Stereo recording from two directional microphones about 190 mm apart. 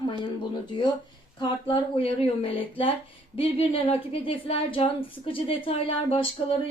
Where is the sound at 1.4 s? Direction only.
25° left (ahead or behind).